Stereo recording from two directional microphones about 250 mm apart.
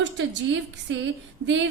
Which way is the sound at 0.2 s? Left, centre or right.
Right.